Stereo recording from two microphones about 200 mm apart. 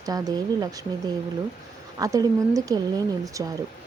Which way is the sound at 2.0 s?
15° right (ahead or behind).